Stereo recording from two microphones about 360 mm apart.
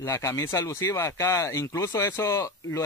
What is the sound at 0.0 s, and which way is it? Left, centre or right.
Speech, centre.